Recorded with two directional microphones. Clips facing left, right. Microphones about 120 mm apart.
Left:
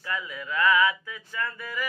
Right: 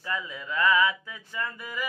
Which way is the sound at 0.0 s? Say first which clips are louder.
Even; 25° right (ahead or behind).